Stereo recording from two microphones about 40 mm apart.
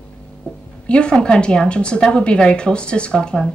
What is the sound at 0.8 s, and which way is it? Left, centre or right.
A woman's voice, left.